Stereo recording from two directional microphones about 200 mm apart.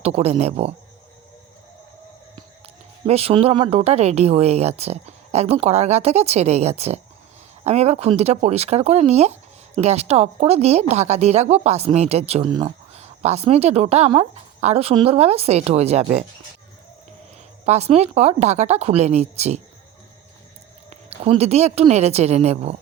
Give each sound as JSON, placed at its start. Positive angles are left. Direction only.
{"t": 0.0, "sound": "speech", "side_deg": -30}
{"t": 3.1, "sound": "speech", "side_deg": -30}
{"t": 17.7, "sound": "speech", "side_deg": -30}
{"t": 20.9, "sound": "speech", "side_deg": -30}